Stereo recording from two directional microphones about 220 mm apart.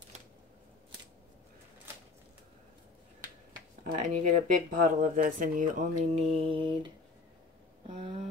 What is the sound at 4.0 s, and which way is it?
Speech, 35° right (ahead or behind).